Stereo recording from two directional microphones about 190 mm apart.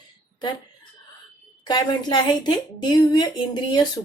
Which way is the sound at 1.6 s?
20° left (ahead or behind).